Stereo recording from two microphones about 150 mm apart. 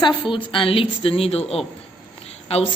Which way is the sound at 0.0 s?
35° left (ahead or behind).